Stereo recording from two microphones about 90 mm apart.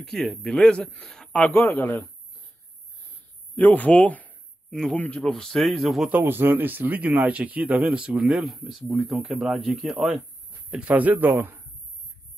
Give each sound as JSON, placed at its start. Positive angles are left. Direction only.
{"t": 0.0, "sound": "a man's voice", "side_deg": 5}
{"t": 3.5, "sound": "speech", "side_deg": 20}
{"t": 4.6, "sound": "speech", "side_deg": 5}
{"t": 4.9, "sound": "a man's voice", "side_deg": 15}
{"t": 5.2, "sound": "speech", "side_deg": 5}
{"t": 6.0, "sound": "speech", "side_deg": -20}
{"t": 8.5, "sound": "speech", "side_deg": 0}
{"t": 10.7, "sound": "speech", "side_deg": -15}